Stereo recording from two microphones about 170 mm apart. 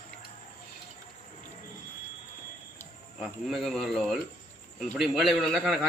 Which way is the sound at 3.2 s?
Centre (ahead or behind).